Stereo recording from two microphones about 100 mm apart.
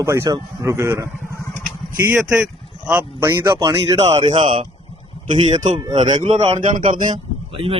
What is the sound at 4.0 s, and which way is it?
Speech, 90° right.